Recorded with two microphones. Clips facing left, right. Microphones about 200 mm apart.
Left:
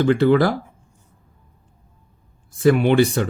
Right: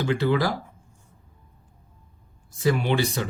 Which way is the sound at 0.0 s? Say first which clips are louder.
Left 8 dB; 55° left (ahead or behind).